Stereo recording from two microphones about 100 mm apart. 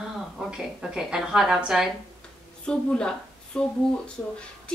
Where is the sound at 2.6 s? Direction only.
10° left (ahead or behind).